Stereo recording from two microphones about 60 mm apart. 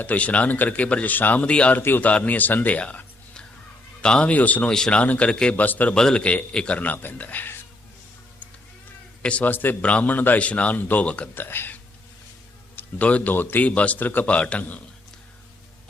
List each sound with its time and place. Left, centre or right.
0.0 s speech: left
1.5 s speech: centre
1.7 s speech: left
4.7 s speech: centre
5.5 s speech: left
5.9 s speech: centre; by 7.6 s left
9.2 s speech: left
9.5 s speech: left
9.8 s speech: left
11.3 s speech: left
12.7 s a man's voice: left
13.7 s speech: left